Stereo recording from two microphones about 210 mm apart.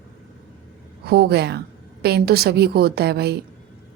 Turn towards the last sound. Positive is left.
turn(degrees=-50)  # may be behind; listen again after turning